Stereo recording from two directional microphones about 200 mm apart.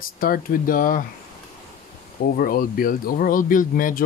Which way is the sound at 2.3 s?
45° left (ahead or behind).